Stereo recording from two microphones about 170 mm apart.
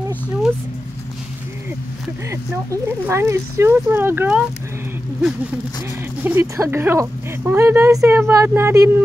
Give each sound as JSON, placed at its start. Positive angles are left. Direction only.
{"t": 2.5, "sound": "speech", "side_deg": -15}
{"t": 6.2, "sound": "speech", "side_deg": -15}